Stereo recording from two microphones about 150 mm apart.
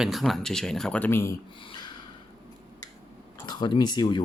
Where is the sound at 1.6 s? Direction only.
30° left (ahead or behind).